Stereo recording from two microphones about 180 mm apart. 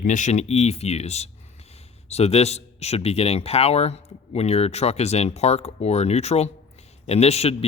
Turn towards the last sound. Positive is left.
turn(degrees=35)  # may be behind; listen again after turning